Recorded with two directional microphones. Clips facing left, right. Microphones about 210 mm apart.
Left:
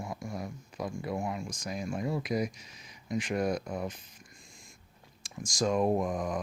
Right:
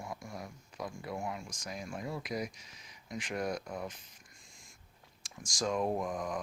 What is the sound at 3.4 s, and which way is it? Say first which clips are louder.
Speech: left 5 dB; 25° left (ahead or behind).